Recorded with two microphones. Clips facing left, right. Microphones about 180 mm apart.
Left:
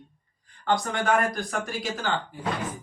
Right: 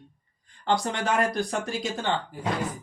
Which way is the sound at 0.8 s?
25° right (ahead or behind).